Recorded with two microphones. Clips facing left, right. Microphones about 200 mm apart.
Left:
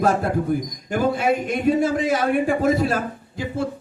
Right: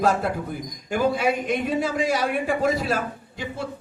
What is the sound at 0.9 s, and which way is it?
A man's voice, 50° left (ahead or behind).